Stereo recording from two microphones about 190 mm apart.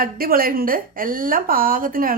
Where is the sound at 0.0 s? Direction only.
50° right (ahead or behind).